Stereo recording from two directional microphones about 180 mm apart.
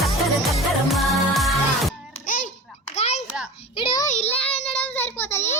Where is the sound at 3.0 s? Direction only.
35° left (ahead or behind).